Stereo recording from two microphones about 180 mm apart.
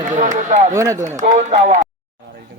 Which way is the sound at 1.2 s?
45° right (ahead or behind).